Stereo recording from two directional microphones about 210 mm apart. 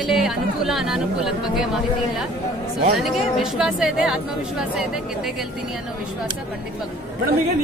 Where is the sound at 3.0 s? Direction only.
Centre (ahead or behind).